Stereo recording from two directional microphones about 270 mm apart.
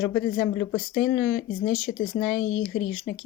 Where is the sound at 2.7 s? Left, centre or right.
Left.